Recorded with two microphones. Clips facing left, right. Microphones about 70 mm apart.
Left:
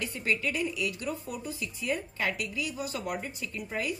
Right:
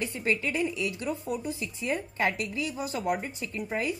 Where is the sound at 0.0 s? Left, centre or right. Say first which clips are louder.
Right 2 dB; right.